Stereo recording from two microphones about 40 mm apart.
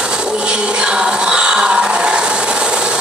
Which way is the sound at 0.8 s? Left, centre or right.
Right.